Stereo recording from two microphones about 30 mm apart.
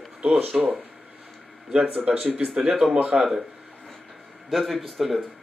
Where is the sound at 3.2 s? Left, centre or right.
Centre.